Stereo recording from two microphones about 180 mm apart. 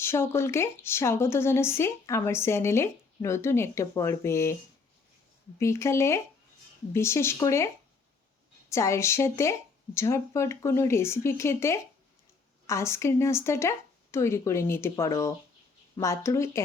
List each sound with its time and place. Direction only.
0.0 s a woman's voice: 15° left (ahead or behind)
5.5 s a woman's voice: 15° left (ahead or behind)
8.7 s a woman's voice: 15° left (ahead or behind)